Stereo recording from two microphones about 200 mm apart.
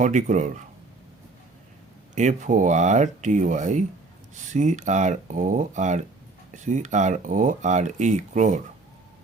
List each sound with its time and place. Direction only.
0.0 s speech: 40° right (ahead or behind)
2.1 s speech: 40° right (ahead or behind)